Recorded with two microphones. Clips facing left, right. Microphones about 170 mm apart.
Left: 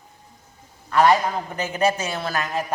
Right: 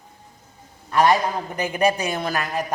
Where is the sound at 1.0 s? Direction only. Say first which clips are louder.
Left 1 dB; 15° right (ahead or behind).